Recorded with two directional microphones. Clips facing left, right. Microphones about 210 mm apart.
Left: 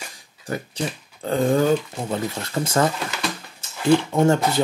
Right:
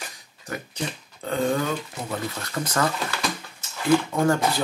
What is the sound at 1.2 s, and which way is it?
Speech, 35° left (ahead or behind).